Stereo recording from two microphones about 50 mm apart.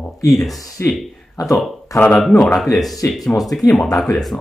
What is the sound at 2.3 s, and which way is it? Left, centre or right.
Speech, centre.